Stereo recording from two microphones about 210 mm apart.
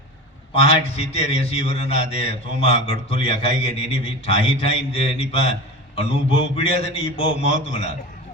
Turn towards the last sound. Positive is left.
turn(degrees=25)  # may be behind; listen again after turning